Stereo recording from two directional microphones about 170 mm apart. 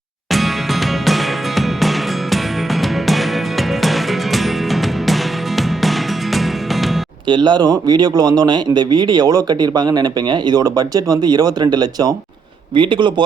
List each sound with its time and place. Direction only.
0.3 s music: centre (ahead or behind)
7.3 s speech: 25° right (ahead or behind)